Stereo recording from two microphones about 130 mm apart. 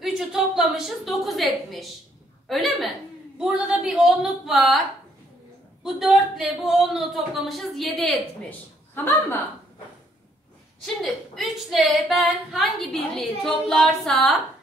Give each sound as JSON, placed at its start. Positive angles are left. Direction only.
{"t": 0.0, "sound": "a woman's voice", "side_deg": -5}
{"t": 5.9, "sound": "speech", "side_deg": 0}
{"t": 8.5, "sound": "a man's voice", "side_deg": 15}
{"t": 11.0, "sound": "speech", "side_deg": 0}